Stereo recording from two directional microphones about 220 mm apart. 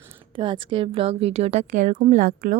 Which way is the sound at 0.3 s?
20° right (ahead or behind).